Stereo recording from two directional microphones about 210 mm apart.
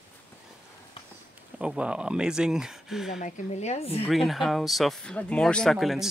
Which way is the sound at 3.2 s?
35° left (ahead or behind).